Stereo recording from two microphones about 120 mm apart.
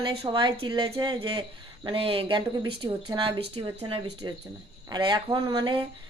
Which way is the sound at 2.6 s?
35° right (ahead or behind).